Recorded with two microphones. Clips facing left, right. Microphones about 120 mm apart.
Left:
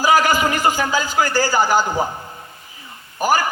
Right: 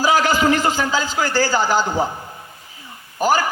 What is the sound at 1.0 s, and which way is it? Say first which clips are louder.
Speech: left 2 dB; 50° left (ahead or behind).